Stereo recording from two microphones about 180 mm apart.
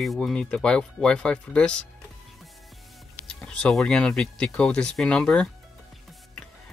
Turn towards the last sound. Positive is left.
turn(degrees=5)  # may be behind; listen again after turning